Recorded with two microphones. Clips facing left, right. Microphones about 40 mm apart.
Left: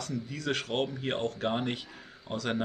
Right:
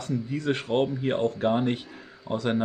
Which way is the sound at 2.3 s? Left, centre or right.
Centre.